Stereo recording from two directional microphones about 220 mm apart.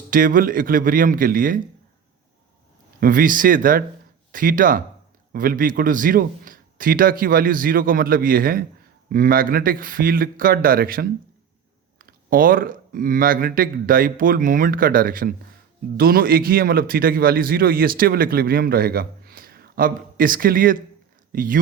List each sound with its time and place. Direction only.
0.1 s speech: 40° right (ahead or behind)
3.0 s a man's voice: 40° right (ahead or behind)